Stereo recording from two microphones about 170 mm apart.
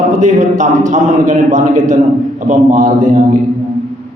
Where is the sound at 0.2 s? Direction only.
45° right (ahead or behind).